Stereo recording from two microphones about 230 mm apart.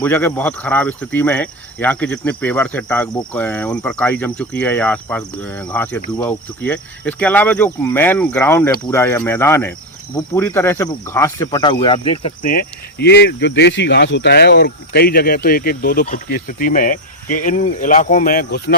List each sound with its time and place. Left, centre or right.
0.0 s speech: centre; by 12.3 s left
12.4 s speech: left